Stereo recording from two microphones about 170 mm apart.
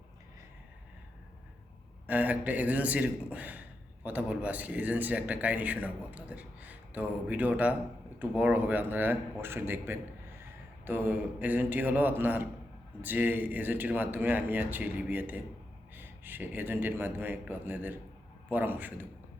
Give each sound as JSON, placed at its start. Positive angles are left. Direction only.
{"t": 2.0, "sound": "a man's voice", "side_deg": -10}